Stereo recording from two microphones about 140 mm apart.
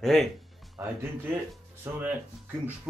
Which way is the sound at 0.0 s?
Centre (ahead or behind).